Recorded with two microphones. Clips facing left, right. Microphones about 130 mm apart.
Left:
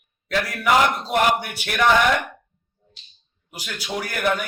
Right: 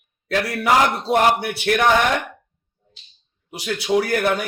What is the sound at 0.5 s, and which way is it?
Speech, 30° right (ahead or behind).